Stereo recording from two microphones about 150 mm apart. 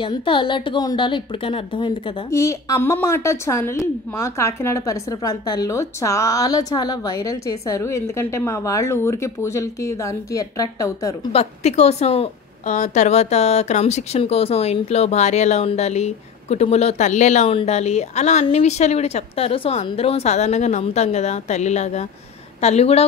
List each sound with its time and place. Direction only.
0.0 s a woman's voice: 35° left (ahead or behind)
2.3 s a woman's voice: 20° left (ahead or behind)
11.3 s a woman's voice: 45° left (ahead or behind)